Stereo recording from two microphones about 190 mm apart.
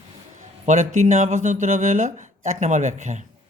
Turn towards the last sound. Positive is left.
turn(degrees=-40)  # may be behind; listen again after turning